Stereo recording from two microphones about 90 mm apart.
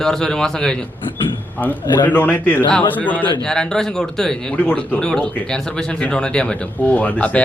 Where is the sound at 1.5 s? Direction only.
20° left (ahead or behind).